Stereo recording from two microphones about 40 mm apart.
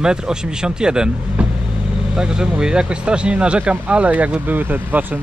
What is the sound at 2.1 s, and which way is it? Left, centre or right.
Speech, centre.